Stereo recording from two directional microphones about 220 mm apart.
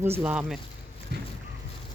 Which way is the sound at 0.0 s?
10° right (ahead or behind).